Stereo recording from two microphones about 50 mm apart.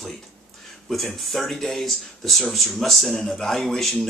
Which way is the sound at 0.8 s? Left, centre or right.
Centre.